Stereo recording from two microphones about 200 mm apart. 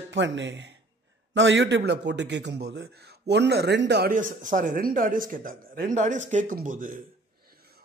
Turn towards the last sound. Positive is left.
turn(degrees=-45)  # may be behind; listen again after turning